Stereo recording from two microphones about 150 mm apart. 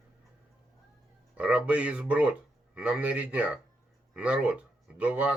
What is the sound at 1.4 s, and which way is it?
A man's voice, 10° right (ahead or behind).